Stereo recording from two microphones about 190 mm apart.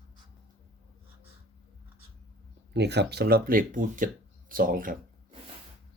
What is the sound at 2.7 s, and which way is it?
Speech, 60° right (ahead or behind).